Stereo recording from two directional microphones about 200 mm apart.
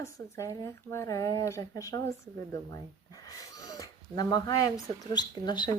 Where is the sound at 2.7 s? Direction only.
20° left (ahead or behind).